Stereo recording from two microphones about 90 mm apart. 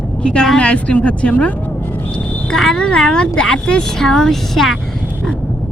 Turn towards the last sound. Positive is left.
turn(degrees=5)  # may be behind; listen again after turning